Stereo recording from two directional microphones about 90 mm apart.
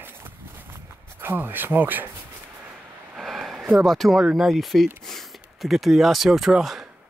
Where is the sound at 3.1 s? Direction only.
5° right (ahead or behind).